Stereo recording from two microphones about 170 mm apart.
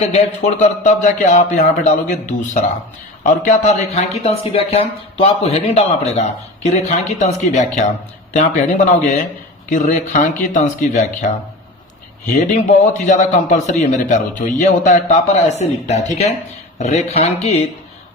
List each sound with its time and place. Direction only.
0.0 s a man's voice: 40° left (ahead or behind)
9.6 s a man's voice: 45° left (ahead or behind)
12.3 s a man's voice: 45° left (ahead or behind)